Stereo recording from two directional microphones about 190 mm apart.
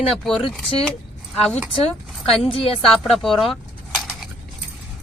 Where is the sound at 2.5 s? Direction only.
30° left (ahead or behind).